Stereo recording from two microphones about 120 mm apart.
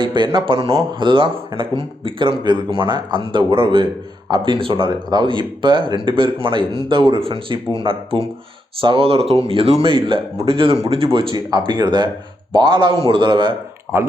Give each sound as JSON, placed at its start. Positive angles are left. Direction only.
{"t": 0.0, "sound": "speech", "side_deg": -40}
{"t": 9.8, "sound": "speech", "side_deg": -45}